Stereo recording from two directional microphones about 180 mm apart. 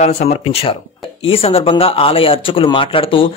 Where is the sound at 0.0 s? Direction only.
40° left (ahead or behind).